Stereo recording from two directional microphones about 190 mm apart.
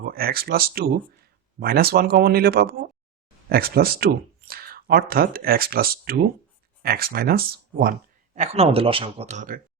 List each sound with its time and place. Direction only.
0.0 s speech: 50° right (ahead or behind)
8.4 s speech: 30° right (ahead or behind)